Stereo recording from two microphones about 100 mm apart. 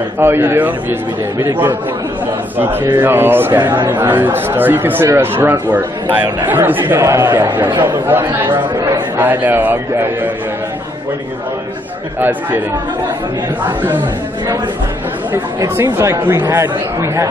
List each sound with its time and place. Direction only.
0.2 s speech: 25° right (ahead or behind)
2.5 s speech: 20° right (ahead or behind)
15.6 s speech: 30° right (ahead or behind)